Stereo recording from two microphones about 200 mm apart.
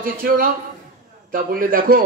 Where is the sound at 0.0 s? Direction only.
45° right (ahead or behind).